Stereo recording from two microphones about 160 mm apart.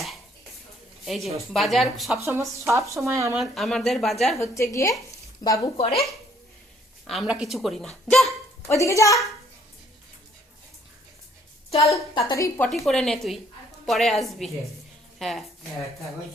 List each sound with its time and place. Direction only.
1.0 s a woman's voice: centre (ahead or behind)
2.2 s speech: 15° right (ahead or behind)
3.3 s a woman's voice: centre (ahead or behind)
4.4 s a woman's voice: 20° left (ahead or behind)
5.7 s speech: 40° left (ahead or behind)
7.1 s a woman's voice: 5° right (ahead or behind)
8.6 s a woman's voice: 20° left (ahead or behind)
11.8 s a woman's voice: 20° left (ahead or behind)
12.6 s a woman's voice: centre (ahead or behind)